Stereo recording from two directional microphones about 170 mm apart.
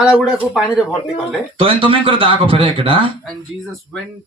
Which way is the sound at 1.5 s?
30° right (ahead or behind).